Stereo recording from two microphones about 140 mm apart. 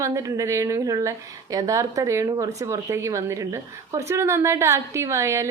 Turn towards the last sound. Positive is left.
turn(degrees=-20)  # may be behind; listen again after turning